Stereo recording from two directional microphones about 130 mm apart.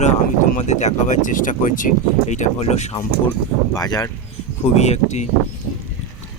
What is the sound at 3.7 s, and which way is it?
Speech, 30° left (ahead or behind).